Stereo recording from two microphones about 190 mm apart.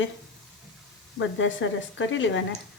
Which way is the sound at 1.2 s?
80° left.